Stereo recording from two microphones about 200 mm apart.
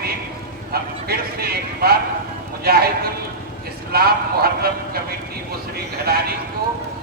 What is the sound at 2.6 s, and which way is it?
Speech, 50° right (ahead or behind).